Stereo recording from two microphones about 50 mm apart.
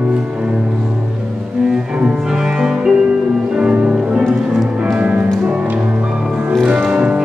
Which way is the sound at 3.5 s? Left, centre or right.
Right.